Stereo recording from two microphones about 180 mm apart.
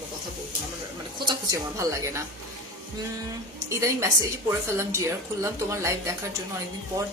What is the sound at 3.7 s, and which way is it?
Speech, 15° right (ahead or behind).